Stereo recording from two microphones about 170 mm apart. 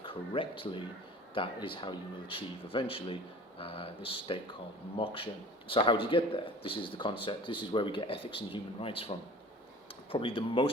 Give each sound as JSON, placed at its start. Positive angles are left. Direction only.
{"t": 0.0, "sound": "speech", "side_deg": 30}